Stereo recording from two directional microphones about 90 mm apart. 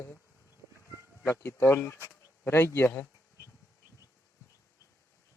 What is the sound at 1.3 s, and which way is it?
Speech, 25° left (ahead or behind).